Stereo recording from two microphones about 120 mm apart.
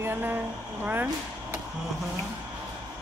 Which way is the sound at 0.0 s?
20° right (ahead or behind).